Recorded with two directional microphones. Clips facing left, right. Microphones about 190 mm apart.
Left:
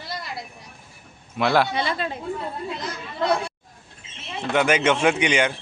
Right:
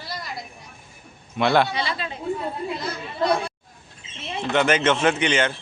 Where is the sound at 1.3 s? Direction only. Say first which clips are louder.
Right 1 dB; centre (ahead or behind).